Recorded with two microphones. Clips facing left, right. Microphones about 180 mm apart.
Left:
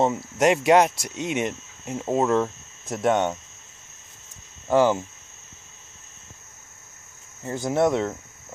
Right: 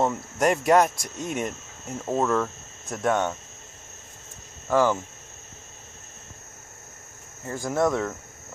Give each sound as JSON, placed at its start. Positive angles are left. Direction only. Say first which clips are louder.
{"t": 0.1, "sound": "speech", "louder": "left 3 dB", "side_deg": 20}
{"t": 0.9, "sound": "speech", "louder": "left 3 dB", "side_deg": 90}
{"t": 1.9, "sound": "speech", "louder": "left 2 dB", "side_deg": 15}
{"t": 2.3, "sound": "cricket", "louder": "left 3 dB", "side_deg": 25}
{"t": 4.6, "sound": "speech", "louder": "left 2 dB", "side_deg": 20}
{"t": 7.4, "sound": "speech", "louder": "left 2 dB", "side_deg": 25}